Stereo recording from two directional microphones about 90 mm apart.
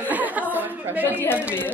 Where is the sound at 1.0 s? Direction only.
25° left (ahead or behind).